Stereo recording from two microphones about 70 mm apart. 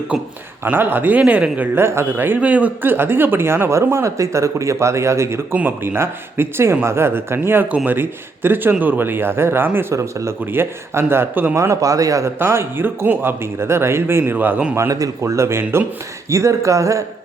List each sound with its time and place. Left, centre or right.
0.6 s speech: right
1.8 s speech: right
5.5 s speech: right
9.9 s a man's voice: right
10.5 s speech: right
11.5 s a man's voice: right
12.4 s speech: right
14.8 s a man's voice: right
15.2 s a man's voice: right